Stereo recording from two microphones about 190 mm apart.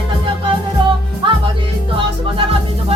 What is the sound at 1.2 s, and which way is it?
Music, 25° right (ahead or behind).